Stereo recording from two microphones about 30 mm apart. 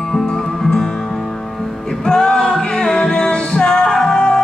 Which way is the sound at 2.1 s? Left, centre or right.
Centre.